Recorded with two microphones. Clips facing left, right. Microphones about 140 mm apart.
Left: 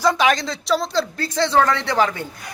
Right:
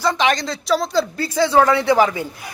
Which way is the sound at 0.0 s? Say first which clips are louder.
Left 1 dB; 5° left (ahead or behind).